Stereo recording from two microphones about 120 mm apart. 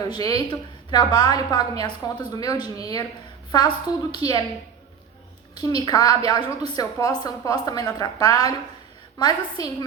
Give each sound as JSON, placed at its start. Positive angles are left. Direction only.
{"t": 0.1, "sound": "a woman's voice", "side_deg": 30}
{"t": 5.5, "sound": "a woman's voice", "side_deg": 35}